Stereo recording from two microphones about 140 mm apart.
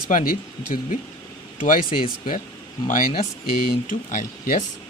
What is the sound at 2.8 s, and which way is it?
Speech, 80° left.